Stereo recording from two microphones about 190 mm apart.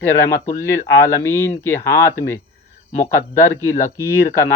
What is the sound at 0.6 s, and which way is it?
Speech, 15° left (ahead or behind).